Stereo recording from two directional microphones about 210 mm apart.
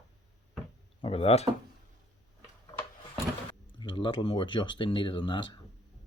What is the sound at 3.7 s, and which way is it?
Speech, 25° left (ahead or behind).